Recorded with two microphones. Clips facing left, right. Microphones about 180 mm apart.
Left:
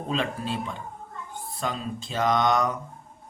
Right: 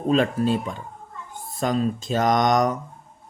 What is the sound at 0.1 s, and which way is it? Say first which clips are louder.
Speech: right 9 dB; 40° right (ahead or behind).